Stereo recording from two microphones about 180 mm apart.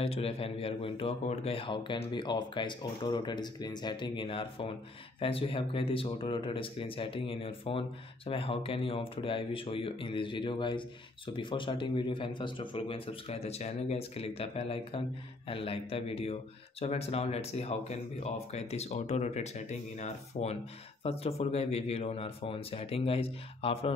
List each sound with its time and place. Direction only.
0.0 s a man's voice: 35° left (ahead or behind)